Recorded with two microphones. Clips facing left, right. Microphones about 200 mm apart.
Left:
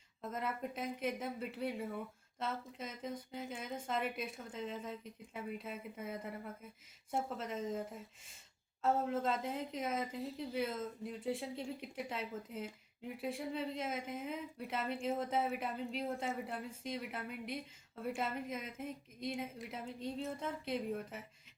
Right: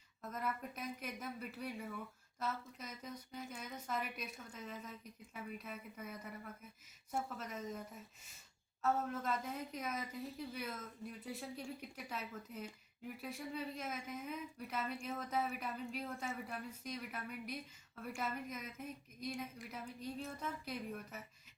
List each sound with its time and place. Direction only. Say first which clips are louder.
0.2 s a woman's voice: left 3 dB; 25° left (ahead or behind)
8.8 s a woman's voice: left 4 dB; 25° left (ahead or behind)